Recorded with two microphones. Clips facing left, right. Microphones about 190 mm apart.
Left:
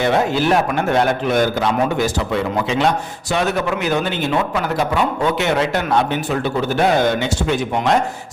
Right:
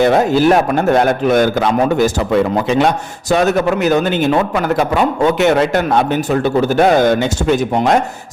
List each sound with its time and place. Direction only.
0.0 s a man's voice: 40° right (ahead or behind)